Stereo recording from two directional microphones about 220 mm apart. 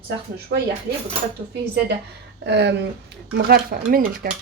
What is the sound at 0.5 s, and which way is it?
Speech, 50° right (ahead or behind).